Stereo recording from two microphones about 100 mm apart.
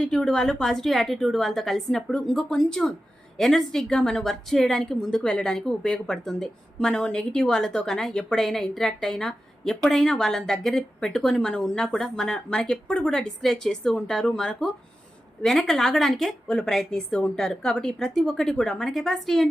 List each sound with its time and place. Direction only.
0.0 s a woman's voice: 5° left (ahead or behind)